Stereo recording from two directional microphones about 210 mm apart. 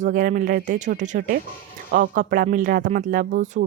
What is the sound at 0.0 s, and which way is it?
Speech, 40° right (ahead or behind).